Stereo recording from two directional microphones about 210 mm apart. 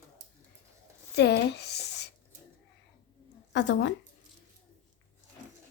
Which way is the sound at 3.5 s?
55° left (ahead or behind).